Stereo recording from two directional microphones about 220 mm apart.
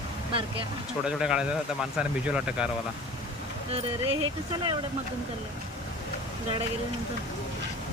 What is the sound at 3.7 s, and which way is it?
Speech, 25° right (ahead or behind).